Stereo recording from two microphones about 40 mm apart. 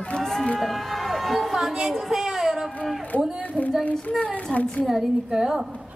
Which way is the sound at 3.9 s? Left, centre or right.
Left.